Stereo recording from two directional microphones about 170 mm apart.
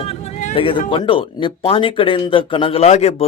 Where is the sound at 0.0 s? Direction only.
35° left (ahead or behind).